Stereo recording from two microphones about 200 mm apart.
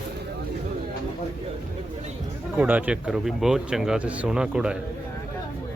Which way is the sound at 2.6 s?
5° right (ahead or behind).